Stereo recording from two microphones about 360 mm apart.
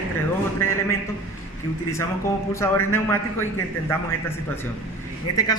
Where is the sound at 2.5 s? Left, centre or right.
Centre.